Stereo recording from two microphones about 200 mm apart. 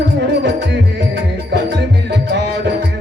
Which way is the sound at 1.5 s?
60° right (ahead or behind).